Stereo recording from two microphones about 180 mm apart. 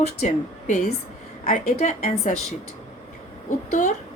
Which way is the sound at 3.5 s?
45° left (ahead or behind).